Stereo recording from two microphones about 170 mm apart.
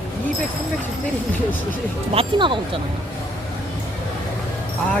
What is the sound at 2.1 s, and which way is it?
Speech, 30° right (ahead or behind).